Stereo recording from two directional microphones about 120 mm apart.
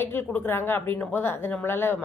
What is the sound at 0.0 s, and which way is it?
A woman's voice, 20° left (ahead or behind).